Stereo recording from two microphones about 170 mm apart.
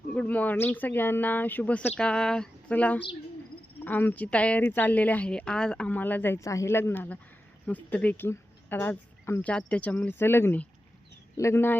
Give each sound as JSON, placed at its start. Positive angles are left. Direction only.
{"t": 0.1, "sound": "a woman's voice", "side_deg": 10}
{"t": 2.0, "sound": "a sound", "side_deg": 5}
{"t": 3.8, "sound": "a woman's voice", "side_deg": 10}